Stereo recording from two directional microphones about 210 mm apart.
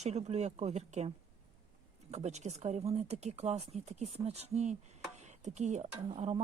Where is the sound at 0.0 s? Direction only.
30° right (ahead or behind).